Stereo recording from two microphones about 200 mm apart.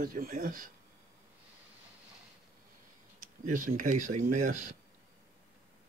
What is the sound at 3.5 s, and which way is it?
Speech, 40° right (ahead or behind).